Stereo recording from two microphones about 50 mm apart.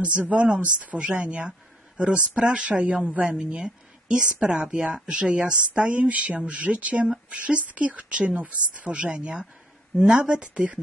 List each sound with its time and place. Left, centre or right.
0.0 s speech: right